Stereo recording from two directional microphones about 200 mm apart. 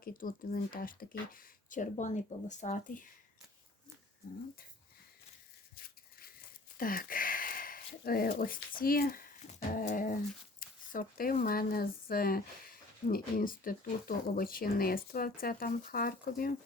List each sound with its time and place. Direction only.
0.0 s speech: 45° left (ahead or behind)
5.7 s a sound: 50° left (ahead or behind)
8.0 s speech: 45° left (ahead or behind)